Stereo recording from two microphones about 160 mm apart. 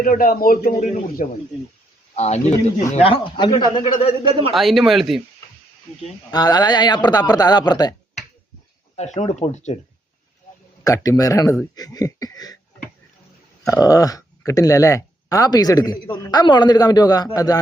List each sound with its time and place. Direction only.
0.0 s a man's voice: 65° left (ahead or behind)
1.2 s speech: 50° left (ahead or behind); by 3.8 s 30° left (ahead or behind)
4.5 s speech: centre (ahead or behind)
6.3 s speech: 25° left (ahead or behind)
9.0 s speech: 45° left (ahead or behind)
10.8 s speech: 20° left (ahead or behind)
13.7 s speech: 20° left (ahead or behind)